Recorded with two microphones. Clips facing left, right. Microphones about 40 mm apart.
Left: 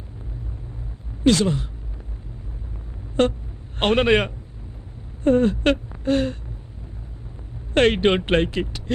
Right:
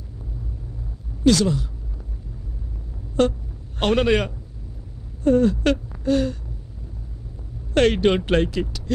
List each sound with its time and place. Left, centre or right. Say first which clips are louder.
1.2 s speech: even; left
3.2 s speech: even; left
7.7 s speech: even; left